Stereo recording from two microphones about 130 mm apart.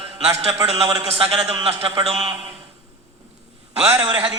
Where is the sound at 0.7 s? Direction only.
25° right (ahead or behind).